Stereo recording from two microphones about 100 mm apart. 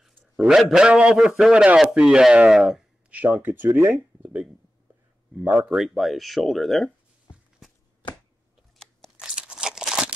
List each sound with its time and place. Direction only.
0.4 s a man's voice: 5° right (ahead or behind)
3.1 s a man's voice: 15° right (ahead or behind)
5.8 s speech: centre (ahead or behind)
9.1 s tearing: 10° right (ahead or behind)